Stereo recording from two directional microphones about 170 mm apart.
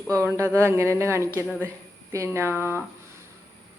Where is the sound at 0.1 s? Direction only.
15° right (ahead or behind).